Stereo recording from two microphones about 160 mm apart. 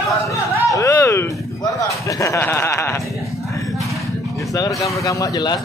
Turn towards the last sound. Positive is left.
turn(degrees=25)  # may be behind; listen again after turning